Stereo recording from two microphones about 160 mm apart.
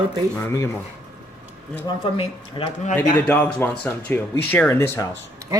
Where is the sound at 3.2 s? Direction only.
10° left (ahead or behind).